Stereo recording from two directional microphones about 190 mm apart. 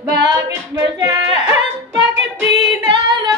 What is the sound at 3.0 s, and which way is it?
Singing, 25° right (ahead or behind).